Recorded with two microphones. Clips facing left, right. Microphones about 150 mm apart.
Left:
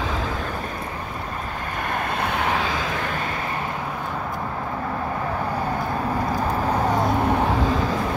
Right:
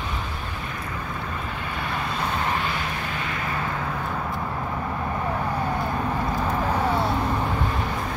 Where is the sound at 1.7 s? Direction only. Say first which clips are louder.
Left 3 dB; 50° left (ahead or behind); by 3.0 s 90° left.